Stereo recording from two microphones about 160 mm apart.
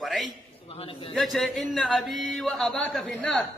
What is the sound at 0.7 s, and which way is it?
Speech, 35° left (ahead or behind).